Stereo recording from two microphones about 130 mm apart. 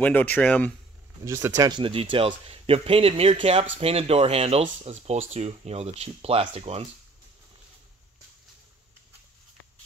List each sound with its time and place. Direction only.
0.0 s speech: 10° left (ahead or behind)
1.2 s speech: 25° right (ahead or behind)
1.7 s a man's voice: 40° right (ahead or behind)